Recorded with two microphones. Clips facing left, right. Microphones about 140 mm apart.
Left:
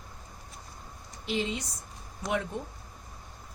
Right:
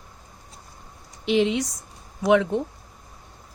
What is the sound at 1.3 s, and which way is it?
A woman's voice, 85° right.